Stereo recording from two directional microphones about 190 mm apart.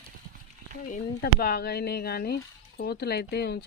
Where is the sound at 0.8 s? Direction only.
45° left (ahead or behind).